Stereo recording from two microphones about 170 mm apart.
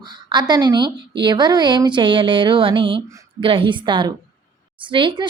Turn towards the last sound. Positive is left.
turn(degrees=-30)  # may be behind; listen again after turning